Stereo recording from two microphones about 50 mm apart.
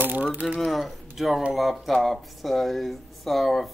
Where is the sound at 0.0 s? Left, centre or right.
Right.